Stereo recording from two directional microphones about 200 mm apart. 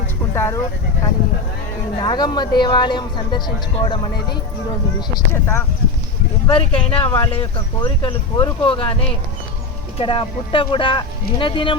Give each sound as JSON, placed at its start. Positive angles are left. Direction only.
{"t": 0.3, "sound": "speech", "side_deg": 15}
{"t": 2.0, "sound": "speech", "side_deg": 20}
{"t": 6.5, "sound": "speech", "side_deg": 30}